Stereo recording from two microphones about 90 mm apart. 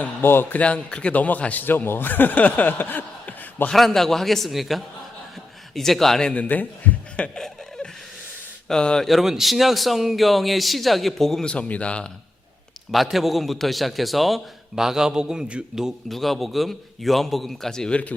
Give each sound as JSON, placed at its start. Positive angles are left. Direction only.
{"t": 0.2, "sound": "speech", "side_deg": 25}
{"t": 0.6, "sound": "speech", "side_deg": 15}
{"t": 3.7, "sound": "a man's voice", "side_deg": 5}
{"t": 7.2, "sound": "a sound", "side_deg": 5}
{"t": 8.6, "sound": "a man's voice", "side_deg": 10}
{"t": 12.9, "sound": "a man's voice", "side_deg": 0}